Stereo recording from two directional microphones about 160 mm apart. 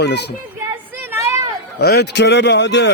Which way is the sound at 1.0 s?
15° right (ahead or behind).